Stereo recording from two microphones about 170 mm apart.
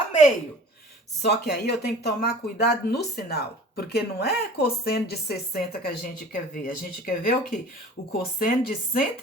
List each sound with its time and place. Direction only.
1.2 s speech: 75° left (ahead or behind); by 9.0 s 55° left (ahead or behind)